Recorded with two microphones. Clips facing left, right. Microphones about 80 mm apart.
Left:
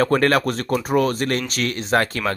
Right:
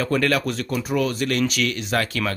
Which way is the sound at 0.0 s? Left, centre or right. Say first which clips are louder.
Left 4 dB; left.